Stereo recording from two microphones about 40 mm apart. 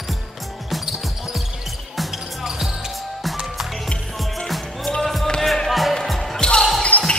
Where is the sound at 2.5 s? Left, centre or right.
Centre.